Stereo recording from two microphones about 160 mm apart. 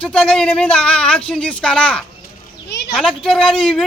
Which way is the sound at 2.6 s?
90° left.